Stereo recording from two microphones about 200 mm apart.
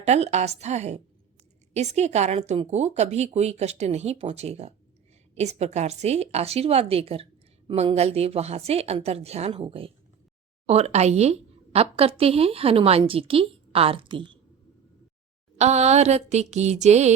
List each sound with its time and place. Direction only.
0.0 s a woman's voice: 35° right (ahead or behind)
15.5 s a woman's voice: 35° right (ahead or behind)